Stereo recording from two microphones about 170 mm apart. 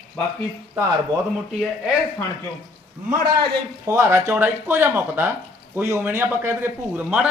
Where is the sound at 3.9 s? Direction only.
15° right (ahead or behind).